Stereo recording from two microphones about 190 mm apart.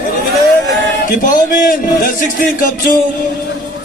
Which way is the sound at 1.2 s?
50° left (ahead or behind).